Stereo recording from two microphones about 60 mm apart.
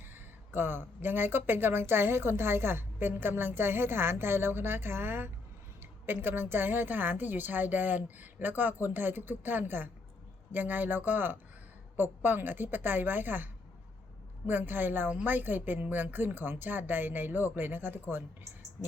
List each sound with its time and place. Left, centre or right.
0.0 s speech: right